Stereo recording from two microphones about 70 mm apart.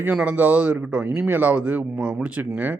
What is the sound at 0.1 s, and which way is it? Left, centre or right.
Speech, centre.